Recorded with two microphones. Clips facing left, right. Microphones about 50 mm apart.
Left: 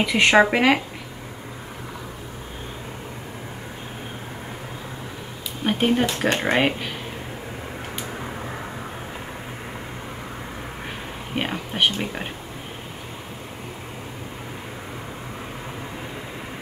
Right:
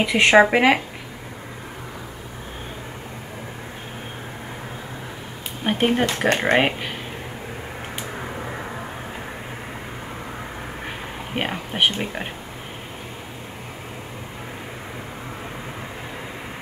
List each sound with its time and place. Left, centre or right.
0.0 s speech: centre
5.6 s speech: centre
11.3 s speech: centre